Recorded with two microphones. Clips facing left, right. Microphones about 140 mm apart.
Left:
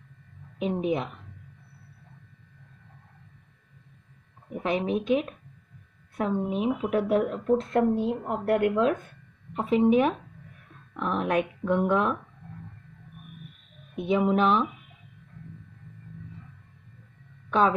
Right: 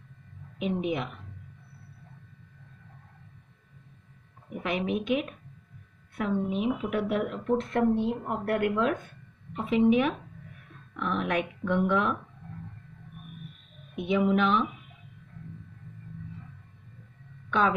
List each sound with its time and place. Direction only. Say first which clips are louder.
0.6 s speech: left 2 dB; 35° left (ahead or behind)
4.5 s speech: left 3 dB; 35° left (ahead or behind)
13.9 s speech: left 1 dB; 40° left (ahead or behind)
17.5 s a woman's voice: left 3 dB; 35° left (ahead or behind)